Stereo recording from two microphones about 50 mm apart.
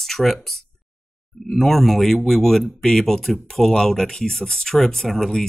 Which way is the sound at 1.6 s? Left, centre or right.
Centre.